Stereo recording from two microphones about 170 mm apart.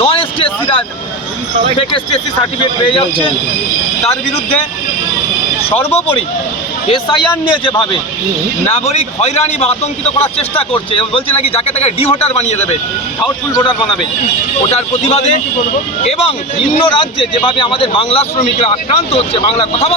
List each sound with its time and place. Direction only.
0.0 s a sound: 35° left (ahead or behind)
2.6 s a man's voice: 30° left (ahead or behind)
5.6 s speech: 35° left (ahead or behind)
6.9 s a man's voice: 30° left (ahead or behind)
14.7 s a man's voice: 40° left (ahead or behind)